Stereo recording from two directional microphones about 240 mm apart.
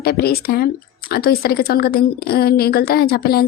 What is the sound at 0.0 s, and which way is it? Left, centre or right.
Speech, left.